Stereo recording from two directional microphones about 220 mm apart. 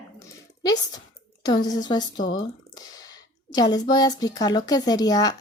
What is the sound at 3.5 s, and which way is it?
Speech, 20° left (ahead or behind).